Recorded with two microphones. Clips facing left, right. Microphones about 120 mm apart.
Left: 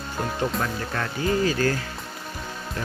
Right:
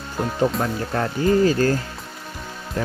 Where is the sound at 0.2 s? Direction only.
Centre (ahead or behind).